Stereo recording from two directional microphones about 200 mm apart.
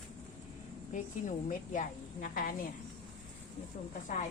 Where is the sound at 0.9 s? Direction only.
40° left (ahead or behind).